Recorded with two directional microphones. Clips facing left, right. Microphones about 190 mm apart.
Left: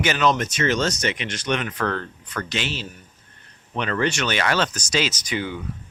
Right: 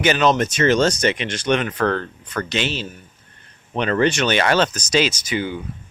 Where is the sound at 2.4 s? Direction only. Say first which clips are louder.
Right 5 dB; 25° right (ahead or behind).